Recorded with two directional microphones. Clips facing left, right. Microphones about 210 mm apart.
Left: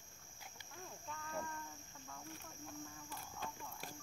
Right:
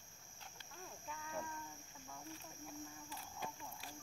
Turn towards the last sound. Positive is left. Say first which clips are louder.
# even
turn(degrees=-10)  # may be behind; listen again after turning